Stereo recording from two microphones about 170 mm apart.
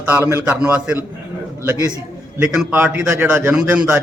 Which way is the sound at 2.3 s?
10° right (ahead or behind).